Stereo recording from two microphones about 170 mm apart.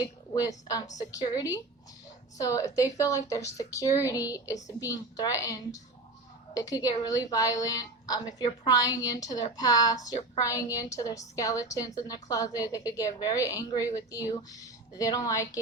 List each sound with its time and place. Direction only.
0.0 s a woman's voice: 20° left (ahead or behind)